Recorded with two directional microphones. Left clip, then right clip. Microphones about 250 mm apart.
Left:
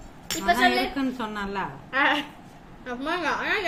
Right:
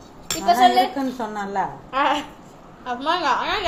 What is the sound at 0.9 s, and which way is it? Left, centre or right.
Speech, left.